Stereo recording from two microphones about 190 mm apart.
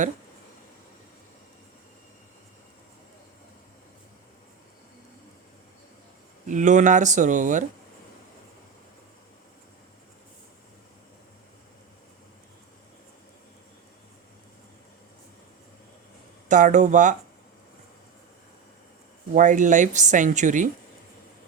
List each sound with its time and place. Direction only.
6.5 s speech: 40° right (ahead or behind)
16.5 s speech: 40° right (ahead or behind)
19.3 s speech: 40° right (ahead or behind)